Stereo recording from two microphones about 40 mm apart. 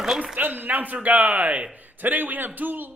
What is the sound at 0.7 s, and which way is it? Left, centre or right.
A man's voice, right.